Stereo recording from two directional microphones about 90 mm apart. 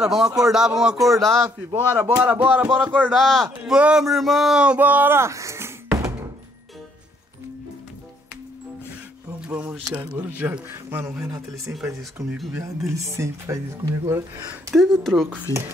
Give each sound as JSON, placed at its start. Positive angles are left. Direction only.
{"t": 0.0, "sound": "speech", "side_deg": -5}
{"t": 1.4, "sound": "speech", "side_deg": -35}
{"t": 2.1, "sound": "speech", "side_deg": -20}
{"t": 3.1, "sound": "speech", "side_deg": 0}
{"t": 3.6, "sound": "speech", "side_deg": -10}
{"t": 9.4, "sound": "a sound", "side_deg": -15}
{"t": 10.0, "sound": "speech", "side_deg": -15}
{"t": 11.2, "sound": "speech", "side_deg": -35}
{"t": 11.7, "sound": "speech", "side_deg": 0}
{"t": 12.5, "sound": "speech", "side_deg": -35}
{"t": 14.7, "sound": "speech", "side_deg": 0}
{"t": 15.5, "sound": "speech", "side_deg": 35}